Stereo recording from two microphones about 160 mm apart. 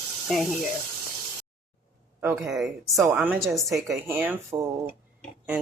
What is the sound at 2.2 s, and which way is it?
Speech, 5° right (ahead or behind).